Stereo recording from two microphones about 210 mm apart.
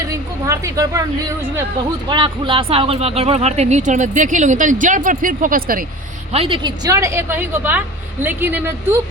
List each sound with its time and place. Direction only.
0.1 s a woman's voice: 15° right (ahead or behind)
2.0 s speech: 20° right (ahead or behind); by 5.8 s 45° right (ahead or behind)
6.3 s a woman's voice: 25° right (ahead or behind); by 9.0 s 10° right (ahead or behind)